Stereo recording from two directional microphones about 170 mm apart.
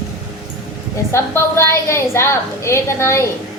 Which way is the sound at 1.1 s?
15° left (ahead or behind).